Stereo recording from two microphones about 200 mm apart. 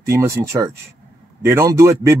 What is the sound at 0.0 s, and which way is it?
Speech, 10° right (ahead or behind).